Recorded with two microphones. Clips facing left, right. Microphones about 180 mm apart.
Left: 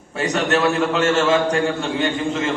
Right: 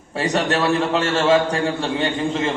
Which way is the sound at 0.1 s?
30° right (ahead or behind).